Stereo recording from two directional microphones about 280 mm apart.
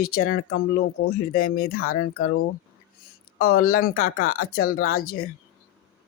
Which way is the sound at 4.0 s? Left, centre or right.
Left.